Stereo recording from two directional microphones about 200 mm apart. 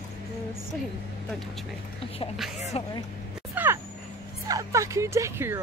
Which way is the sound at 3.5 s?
10° right (ahead or behind).